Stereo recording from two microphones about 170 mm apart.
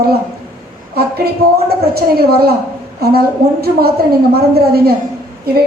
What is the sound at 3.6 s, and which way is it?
A woman's voice, 65° right (ahead or behind).